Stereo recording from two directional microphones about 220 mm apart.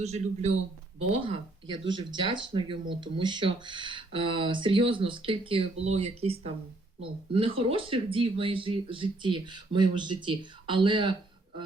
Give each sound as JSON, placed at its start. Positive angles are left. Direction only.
{"t": 0.0, "sound": "speech", "side_deg": -30}